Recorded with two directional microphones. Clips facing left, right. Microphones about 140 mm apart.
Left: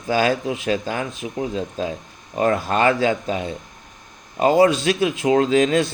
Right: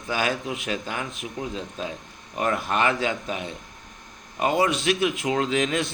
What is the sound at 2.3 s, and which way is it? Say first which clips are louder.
Speech: left 5 dB; 35° left (ahead or behind).